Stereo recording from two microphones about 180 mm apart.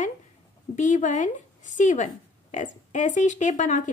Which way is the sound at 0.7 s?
40° left (ahead or behind).